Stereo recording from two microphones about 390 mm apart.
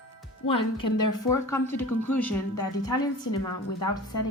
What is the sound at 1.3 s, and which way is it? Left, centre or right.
Speech, centre.